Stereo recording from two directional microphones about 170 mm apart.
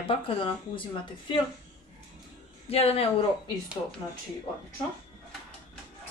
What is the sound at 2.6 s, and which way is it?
Speech, 35° left (ahead or behind).